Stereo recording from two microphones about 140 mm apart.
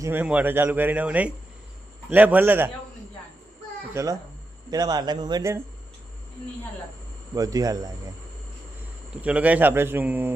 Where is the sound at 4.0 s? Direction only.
20° right (ahead or behind).